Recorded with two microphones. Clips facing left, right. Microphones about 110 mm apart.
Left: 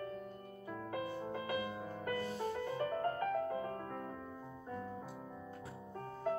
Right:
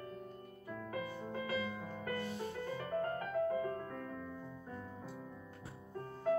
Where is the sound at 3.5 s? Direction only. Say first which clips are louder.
Right 2 dB; 25° left (ahead or behind).